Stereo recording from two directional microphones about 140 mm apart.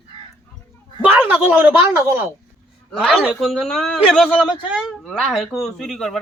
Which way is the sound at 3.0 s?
5° right (ahead or behind).